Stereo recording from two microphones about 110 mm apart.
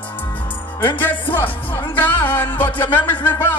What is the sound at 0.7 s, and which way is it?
Speech, 20° left (ahead or behind).